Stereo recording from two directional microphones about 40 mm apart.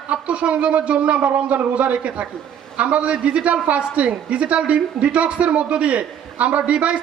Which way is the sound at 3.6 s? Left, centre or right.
Right.